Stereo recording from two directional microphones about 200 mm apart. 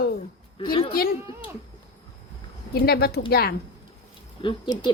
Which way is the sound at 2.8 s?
50° left (ahead or behind).